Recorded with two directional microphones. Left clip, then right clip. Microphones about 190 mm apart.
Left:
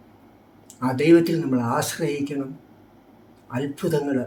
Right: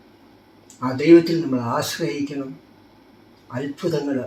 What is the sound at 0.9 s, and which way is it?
Speech, 15° left (ahead or behind).